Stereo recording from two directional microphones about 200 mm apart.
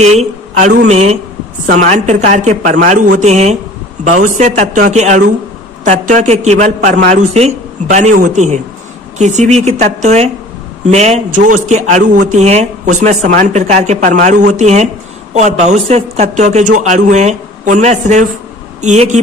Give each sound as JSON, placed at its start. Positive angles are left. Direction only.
{"t": 0.0, "sound": "a woman's voice", "side_deg": -35}